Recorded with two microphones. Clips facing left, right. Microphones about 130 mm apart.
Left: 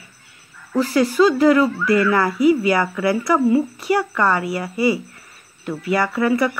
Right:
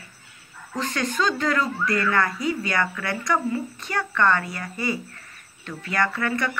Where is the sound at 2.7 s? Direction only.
25° left (ahead or behind).